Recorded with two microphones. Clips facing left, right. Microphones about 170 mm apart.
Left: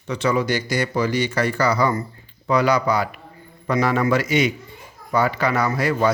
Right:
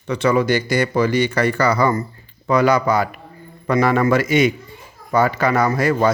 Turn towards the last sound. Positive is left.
turn(degrees=-45)  # may be behind; listen again after turning